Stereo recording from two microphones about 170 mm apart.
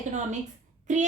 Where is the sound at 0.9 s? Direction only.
45° right (ahead or behind).